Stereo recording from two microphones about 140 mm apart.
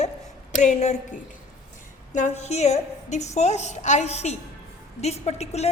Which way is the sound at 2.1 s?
55° left (ahead or behind).